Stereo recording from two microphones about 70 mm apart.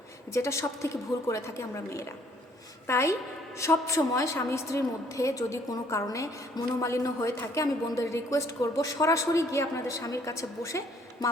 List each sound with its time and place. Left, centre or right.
0.3 s a woman's voice: left